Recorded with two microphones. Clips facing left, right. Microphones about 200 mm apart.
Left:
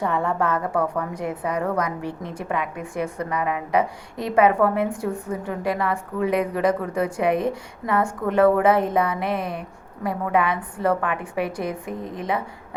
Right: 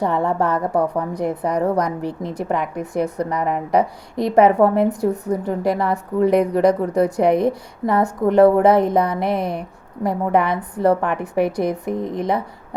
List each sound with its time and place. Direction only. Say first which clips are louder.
0.0 s a woman's voice: right 4 dB; 35° right (ahead or behind)